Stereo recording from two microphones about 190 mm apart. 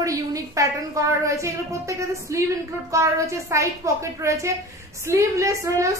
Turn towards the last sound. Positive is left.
turn(degrees=-15)  # may be behind; listen again after turning